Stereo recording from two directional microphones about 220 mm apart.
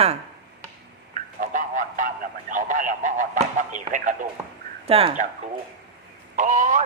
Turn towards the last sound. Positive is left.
turn(degrees=-35)  # may be behind; listen again after turning